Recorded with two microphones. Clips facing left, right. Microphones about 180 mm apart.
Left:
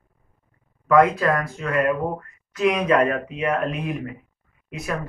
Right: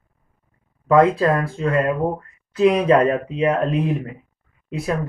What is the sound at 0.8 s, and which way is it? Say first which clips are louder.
Speech: right 2 dB; 30° right (ahead or behind).